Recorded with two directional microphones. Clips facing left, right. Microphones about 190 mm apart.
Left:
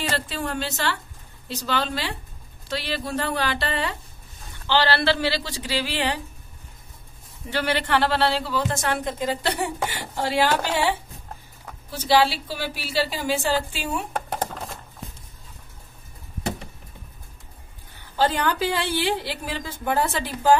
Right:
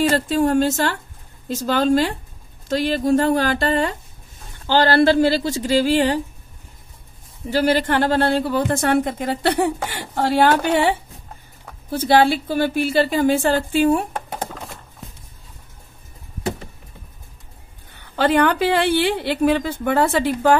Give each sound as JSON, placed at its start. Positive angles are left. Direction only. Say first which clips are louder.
{"t": 0.1, "sound": "a woman's voice", "louder": "right 11 dB", "side_deg": -45}
{"t": 7.4, "sound": "a woman's voice", "louder": "right 7 dB", "side_deg": -40}
{"t": 18.1, "sound": "a woman's voice", "louder": "right 6 dB", "side_deg": -65}